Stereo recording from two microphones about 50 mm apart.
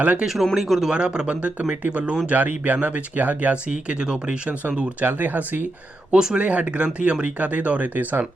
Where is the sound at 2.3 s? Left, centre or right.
Right.